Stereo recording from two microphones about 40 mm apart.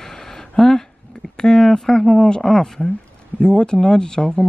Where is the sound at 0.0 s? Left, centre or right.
Centre.